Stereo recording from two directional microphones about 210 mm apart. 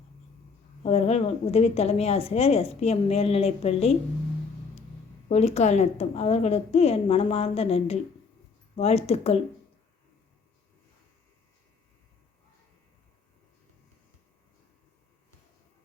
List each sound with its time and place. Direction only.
0.8 s a woman's voice: 30° left (ahead or behind)
5.3 s a woman's voice: 30° left (ahead or behind)